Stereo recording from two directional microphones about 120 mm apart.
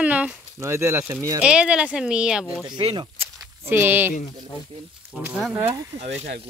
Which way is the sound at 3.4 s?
20° right (ahead or behind).